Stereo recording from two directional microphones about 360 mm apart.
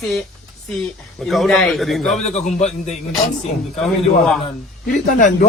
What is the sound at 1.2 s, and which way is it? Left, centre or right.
Speech, centre.